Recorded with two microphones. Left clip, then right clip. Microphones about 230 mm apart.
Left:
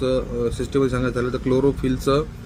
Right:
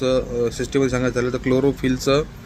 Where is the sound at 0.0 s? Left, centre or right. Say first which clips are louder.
Right 2 dB; centre.